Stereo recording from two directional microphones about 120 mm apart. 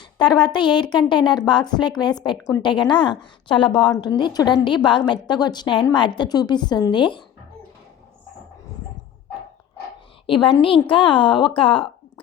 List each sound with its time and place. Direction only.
0.2 s a woman's voice: 40° left (ahead or behind)
10.2 s a woman's voice: 45° left (ahead or behind)